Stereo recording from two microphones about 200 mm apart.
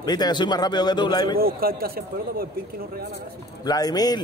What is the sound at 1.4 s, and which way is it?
A man's voice, 50° right (ahead or behind).